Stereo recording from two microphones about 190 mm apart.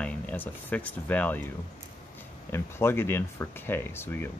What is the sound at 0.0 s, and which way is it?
Speech, 10° left (ahead or behind).